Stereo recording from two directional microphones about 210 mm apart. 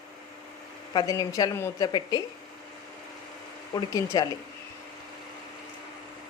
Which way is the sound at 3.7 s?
15° left (ahead or behind).